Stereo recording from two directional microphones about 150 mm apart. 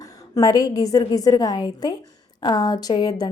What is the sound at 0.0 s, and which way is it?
A woman's voice, 20° left (ahead or behind).